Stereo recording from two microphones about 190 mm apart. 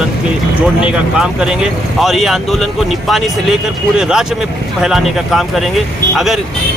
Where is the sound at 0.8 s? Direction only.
5° right (ahead or behind).